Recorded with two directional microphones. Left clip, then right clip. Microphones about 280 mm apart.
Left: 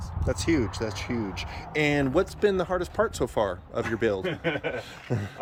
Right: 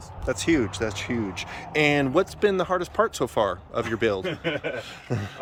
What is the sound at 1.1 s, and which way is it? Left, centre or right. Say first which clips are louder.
Speech: right 2 dB; right.